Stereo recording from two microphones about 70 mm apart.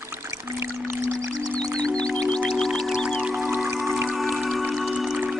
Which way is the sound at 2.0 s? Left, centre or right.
Centre.